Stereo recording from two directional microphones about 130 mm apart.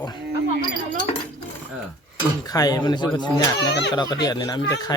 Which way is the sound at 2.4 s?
30° left (ahead or behind).